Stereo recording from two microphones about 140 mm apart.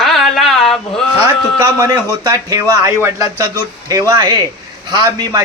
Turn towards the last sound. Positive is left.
turn(degrees=-30)  # may be behind; listen again after turning